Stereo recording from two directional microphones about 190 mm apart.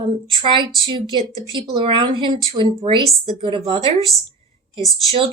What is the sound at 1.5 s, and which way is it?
A woman's voice, 25° right (ahead or behind).